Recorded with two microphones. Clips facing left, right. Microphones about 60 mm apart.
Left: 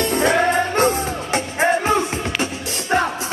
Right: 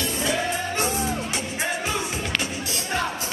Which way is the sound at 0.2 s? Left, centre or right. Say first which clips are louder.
Left 9 dB; left.